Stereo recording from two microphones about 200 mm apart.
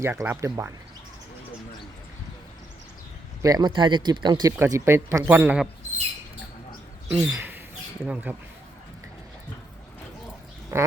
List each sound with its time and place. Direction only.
0.0 s speech: 10° right (ahead or behind)
3.4 s speech: 20° right (ahead or behind)
7.1 s speech: 10° right (ahead or behind)
10.7 s speech: 15° right (ahead or behind)